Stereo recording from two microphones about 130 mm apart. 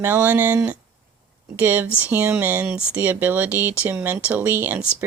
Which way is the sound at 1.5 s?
15° right (ahead or behind).